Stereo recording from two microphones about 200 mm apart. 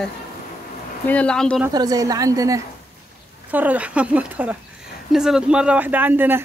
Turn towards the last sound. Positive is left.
turn(degrees=-10)  # may be behind; listen again after turning